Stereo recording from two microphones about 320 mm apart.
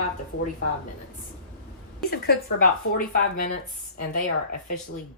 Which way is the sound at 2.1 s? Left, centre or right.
Left.